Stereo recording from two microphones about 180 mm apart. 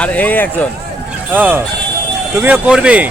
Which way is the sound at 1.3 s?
10° right (ahead or behind).